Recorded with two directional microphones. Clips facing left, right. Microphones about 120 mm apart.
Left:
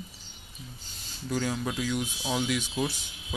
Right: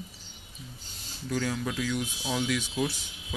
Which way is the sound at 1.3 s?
20° left (ahead or behind).